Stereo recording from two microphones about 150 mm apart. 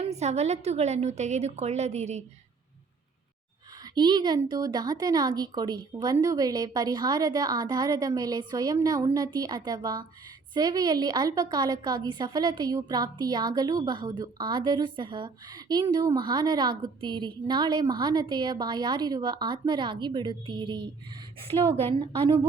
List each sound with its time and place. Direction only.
0.0 s a woman's voice: 45° right (ahead or behind)
3.9 s a woman's voice: 30° right (ahead or behind)
21.9 s a woman's voice: 35° right (ahead or behind)